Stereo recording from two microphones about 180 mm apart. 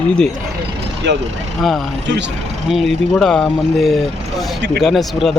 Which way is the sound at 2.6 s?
Centre (ahead or behind).